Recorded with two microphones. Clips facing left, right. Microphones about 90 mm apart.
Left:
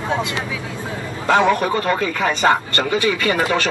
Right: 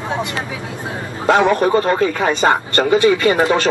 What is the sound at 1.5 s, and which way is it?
Speech, 30° right (ahead or behind).